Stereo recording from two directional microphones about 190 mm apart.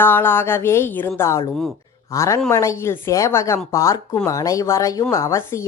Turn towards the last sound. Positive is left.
turn(degrees=15)  # may be behind; listen again after turning